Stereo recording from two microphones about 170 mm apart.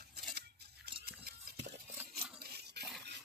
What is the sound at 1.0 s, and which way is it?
Stir, 65° right (ahead or behind).